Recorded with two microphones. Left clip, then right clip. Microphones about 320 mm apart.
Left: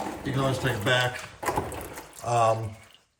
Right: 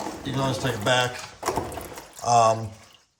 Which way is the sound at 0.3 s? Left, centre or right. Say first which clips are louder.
Right 1 dB; centre.